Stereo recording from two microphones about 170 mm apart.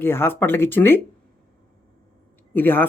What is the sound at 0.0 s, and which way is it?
Speech, 15° left (ahead or behind).